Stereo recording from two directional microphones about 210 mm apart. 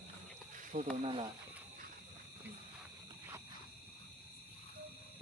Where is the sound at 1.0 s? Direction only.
25° right (ahead or behind).